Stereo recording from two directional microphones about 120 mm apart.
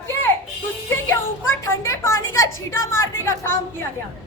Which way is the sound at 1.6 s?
25° left (ahead or behind).